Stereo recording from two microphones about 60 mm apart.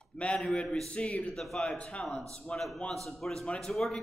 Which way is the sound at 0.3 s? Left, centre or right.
Centre.